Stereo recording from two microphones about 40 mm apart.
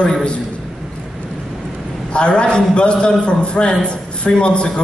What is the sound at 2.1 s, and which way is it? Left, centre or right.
A man's voice, left.